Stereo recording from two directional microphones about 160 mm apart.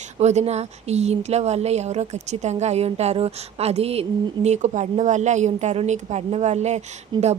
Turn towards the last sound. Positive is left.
turn(degrees=-45)  # may be behind; listen again after turning